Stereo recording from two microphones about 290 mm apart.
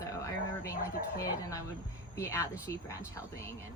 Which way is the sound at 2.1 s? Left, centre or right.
Centre.